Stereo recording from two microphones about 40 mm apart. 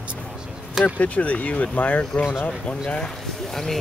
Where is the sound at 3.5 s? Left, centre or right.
Centre.